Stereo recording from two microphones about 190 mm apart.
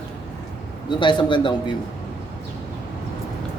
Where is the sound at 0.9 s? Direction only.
25° left (ahead or behind).